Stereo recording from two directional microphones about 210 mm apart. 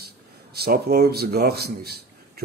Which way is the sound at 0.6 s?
45° right (ahead or behind).